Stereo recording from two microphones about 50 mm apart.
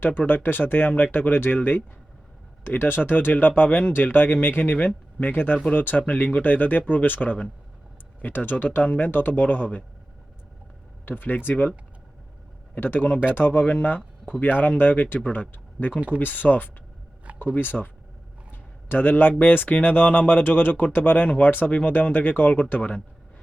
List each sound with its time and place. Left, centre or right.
0.3 s speech: left
2.8 s speech: left
11.0 s speech: left
12.7 s speech: left
15.9 s speech: right
16.1 s speech: left
18.5 s a sound: left
19.4 s speech: left